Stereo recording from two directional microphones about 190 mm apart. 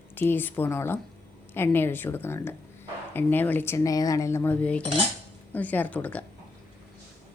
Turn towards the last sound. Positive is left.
turn(degrees=10)  # may be behind; listen again after turning